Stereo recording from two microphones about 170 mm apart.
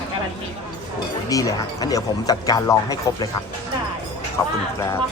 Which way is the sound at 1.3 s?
20° left (ahead or behind).